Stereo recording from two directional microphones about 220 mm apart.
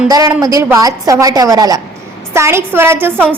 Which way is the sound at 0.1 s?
15° right (ahead or behind).